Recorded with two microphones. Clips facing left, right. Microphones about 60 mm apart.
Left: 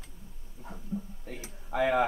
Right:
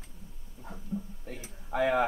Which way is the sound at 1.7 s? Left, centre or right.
Centre.